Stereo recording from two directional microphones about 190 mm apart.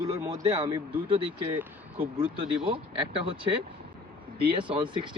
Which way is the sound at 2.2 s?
30° right (ahead or behind).